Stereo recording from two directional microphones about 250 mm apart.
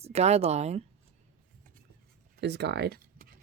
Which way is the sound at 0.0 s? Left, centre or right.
Right.